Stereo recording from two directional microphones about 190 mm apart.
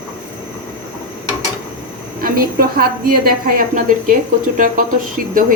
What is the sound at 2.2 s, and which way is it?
A woman's voice, 50° right (ahead or behind).